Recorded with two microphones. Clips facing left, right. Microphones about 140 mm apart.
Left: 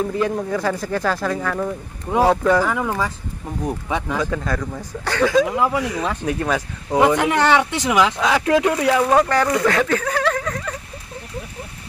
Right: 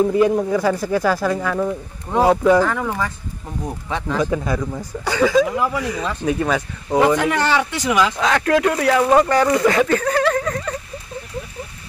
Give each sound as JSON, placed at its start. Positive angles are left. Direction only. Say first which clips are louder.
{"t": 0.1, "sound": "speech", "louder": "right 5 dB", "side_deg": -15}
{"t": 2.6, "sound": "speech", "louder": "even", "side_deg": 10}
{"t": 4.2, "sound": "speech", "louder": "right 3 dB", "side_deg": -15}
{"t": 5.5, "sound": "speech", "louder": "left 1 dB", "side_deg": 15}
{"t": 6.2, "sound": "speech", "louder": "right 2 dB", "side_deg": 0}
{"t": 7.2, "sound": "speech", "louder": "left 2 dB", "side_deg": 15}
{"t": 8.2, "sound": "speech", "louder": "even", "side_deg": 5}
{"t": 9.0, "sound": "speech", "louder": "right 2 dB", "side_deg": -5}